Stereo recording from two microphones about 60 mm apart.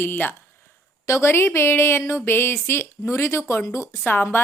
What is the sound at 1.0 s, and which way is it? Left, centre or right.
Speech, left.